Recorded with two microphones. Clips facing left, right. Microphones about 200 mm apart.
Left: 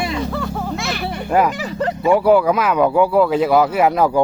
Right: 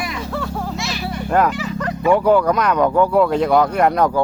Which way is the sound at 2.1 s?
10° left (ahead or behind).